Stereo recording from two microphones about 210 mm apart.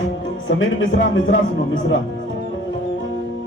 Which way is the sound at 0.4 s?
65° left (ahead or behind).